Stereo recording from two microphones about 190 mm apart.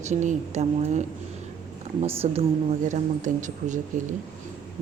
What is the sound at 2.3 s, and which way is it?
Speech, 40° right (ahead or behind).